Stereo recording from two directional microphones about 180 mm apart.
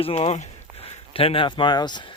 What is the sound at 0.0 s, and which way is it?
Speech, 35° left (ahead or behind).